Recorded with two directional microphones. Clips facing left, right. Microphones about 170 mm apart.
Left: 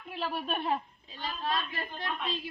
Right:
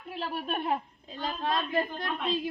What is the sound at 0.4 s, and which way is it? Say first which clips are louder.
Speech: right 2 dB; 10° right (ahead or behind).